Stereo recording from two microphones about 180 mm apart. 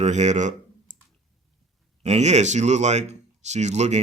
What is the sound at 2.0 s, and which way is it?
Speech, 40° right (ahead or behind).